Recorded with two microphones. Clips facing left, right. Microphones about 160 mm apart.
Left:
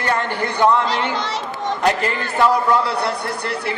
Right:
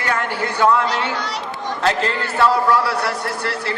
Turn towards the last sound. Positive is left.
turn(degrees=20)  # may be behind; listen again after turning